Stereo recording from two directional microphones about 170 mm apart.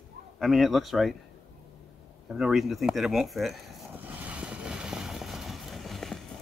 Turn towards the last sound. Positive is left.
turn(degrees=0)  # may be behind; listen again after turning